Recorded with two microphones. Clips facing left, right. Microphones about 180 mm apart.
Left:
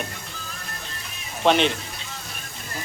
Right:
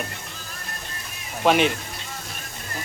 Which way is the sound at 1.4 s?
10° right (ahead or behind).